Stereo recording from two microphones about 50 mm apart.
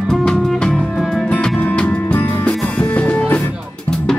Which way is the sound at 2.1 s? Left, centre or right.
Left.